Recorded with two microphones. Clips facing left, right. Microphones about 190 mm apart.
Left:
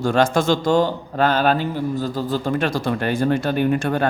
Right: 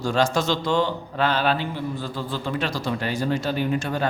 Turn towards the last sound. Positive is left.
turn(degrees=55)  # may be behind; listen again after turning